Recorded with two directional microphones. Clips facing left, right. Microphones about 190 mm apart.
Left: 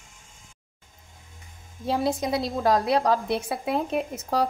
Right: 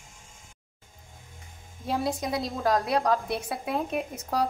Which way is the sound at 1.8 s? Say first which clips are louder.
Left 4 dB; 30° left (ahead or behind).